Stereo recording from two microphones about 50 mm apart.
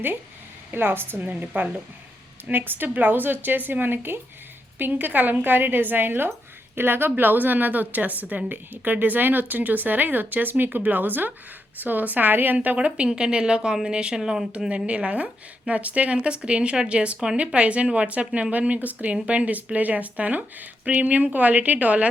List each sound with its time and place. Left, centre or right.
0.7 s a woman's voice: right
12.6 s speech: right; by 14.4 s centre
14.8 s a woman's voice: right